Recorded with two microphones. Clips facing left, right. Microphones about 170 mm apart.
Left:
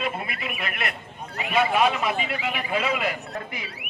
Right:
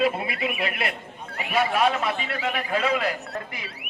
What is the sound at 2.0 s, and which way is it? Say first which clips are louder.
Speech: left 1 dB; 15° left (ahead or behind).